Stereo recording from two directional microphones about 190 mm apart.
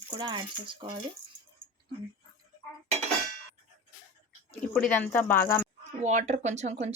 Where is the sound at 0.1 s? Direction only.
25° right (ahead or behind).